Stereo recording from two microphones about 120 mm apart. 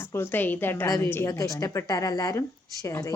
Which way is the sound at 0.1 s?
15° left (ahead or behind).